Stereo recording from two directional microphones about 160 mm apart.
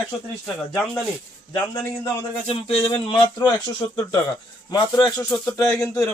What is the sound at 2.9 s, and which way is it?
Speech, 30° left (ahead or behind).